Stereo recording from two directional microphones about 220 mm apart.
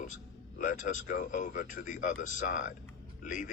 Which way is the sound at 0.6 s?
35° left (ahead or behind).